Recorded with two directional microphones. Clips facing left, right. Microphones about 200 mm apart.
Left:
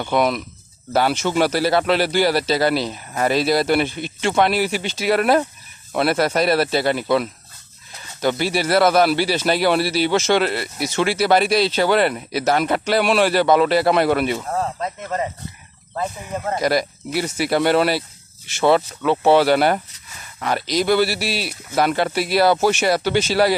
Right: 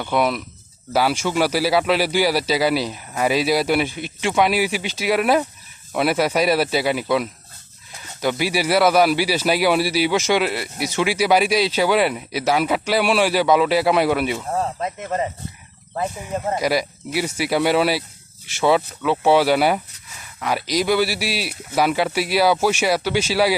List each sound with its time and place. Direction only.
0.1 s a man's voice: 5° right (ahead or behind)
14.8 s a man's voice: 15° right (ahead or behind)
16.5 s a man's voice: 10° right (ahead or behind)